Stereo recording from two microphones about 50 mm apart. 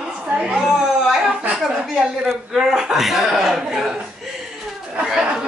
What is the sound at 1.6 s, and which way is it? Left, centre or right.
Speech, centre.